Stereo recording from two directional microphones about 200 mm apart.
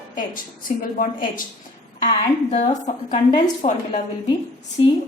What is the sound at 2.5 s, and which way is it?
Speech, 35° left (ahead or behind).